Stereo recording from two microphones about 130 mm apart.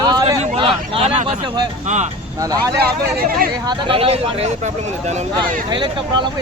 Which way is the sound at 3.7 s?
45° right (ahead or behind).